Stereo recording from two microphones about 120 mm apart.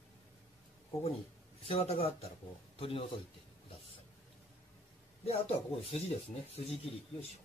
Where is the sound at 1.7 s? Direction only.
55° left (ahead or behind).